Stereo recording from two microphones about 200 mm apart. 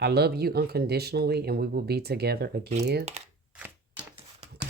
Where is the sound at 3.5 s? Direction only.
5° right (ahead or behind).